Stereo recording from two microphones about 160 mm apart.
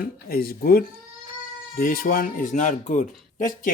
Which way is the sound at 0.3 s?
70° left (ahead or behind).